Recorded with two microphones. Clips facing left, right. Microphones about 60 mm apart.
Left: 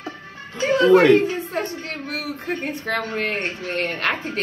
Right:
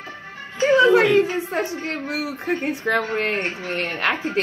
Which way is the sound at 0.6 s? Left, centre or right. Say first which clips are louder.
Even; right.